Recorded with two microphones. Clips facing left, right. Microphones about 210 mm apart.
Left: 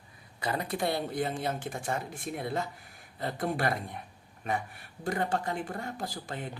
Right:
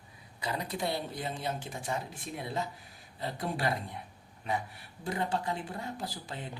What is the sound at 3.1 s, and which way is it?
Speech, 50° left (ahead or behind).